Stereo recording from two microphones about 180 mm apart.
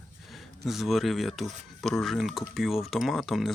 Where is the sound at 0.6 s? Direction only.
Centre (ahead or behind).